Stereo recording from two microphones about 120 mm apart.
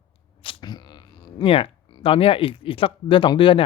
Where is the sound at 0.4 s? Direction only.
35° left (ahead or behind).